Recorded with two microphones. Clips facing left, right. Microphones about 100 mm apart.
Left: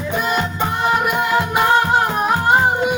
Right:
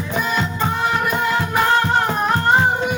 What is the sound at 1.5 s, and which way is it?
Music, 10° left (ahead or behind).